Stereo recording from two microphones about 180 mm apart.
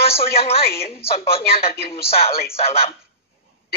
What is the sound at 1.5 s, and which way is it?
Speech, 60° left (ahead or behind).